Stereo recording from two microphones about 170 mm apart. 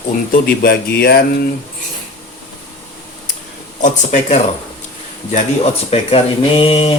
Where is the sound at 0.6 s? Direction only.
60° left (ahead or behind).